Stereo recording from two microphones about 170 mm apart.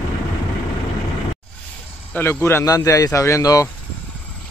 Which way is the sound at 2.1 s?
15° left (ahead or behind).